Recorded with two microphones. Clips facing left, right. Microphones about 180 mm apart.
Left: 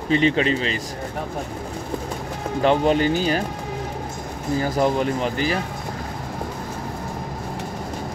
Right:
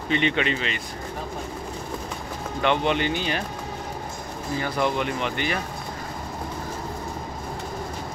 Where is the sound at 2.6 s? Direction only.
40° left (ahead or behind).